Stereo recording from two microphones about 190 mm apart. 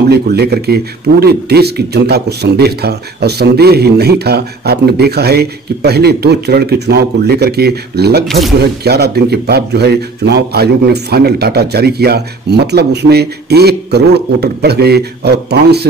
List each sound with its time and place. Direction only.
0.1 s speech: 55° right (ahead or behind)